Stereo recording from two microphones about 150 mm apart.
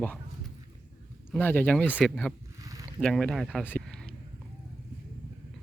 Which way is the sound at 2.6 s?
25° right (ahead or behind).